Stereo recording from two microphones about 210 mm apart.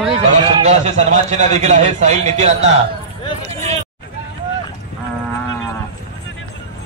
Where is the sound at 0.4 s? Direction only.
30° right (ahead or behind).